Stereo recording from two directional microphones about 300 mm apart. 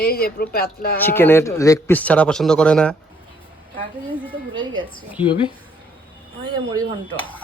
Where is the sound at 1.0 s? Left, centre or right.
Centre.